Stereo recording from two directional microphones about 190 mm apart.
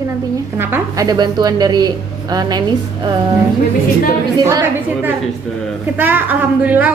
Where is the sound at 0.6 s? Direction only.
15° right (ahead or behind).